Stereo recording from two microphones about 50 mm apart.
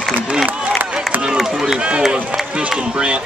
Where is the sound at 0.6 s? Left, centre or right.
Right.